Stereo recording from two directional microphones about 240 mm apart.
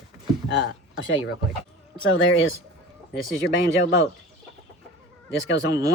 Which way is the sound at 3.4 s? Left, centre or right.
Left.